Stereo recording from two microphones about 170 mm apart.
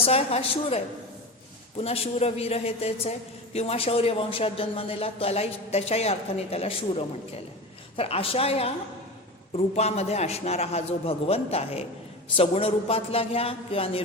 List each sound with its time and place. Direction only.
0.0 s a woman's voice: 35° left (ahead or behind)
1.8 s a woman's voice: 35° left (ahead or behind)